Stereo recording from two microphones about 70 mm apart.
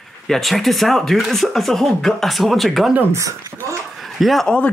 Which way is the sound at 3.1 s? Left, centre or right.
Right.